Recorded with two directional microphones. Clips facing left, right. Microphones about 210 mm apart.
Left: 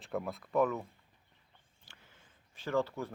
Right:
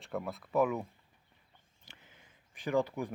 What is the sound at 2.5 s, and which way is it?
Speech, 15° right (ahead or behind).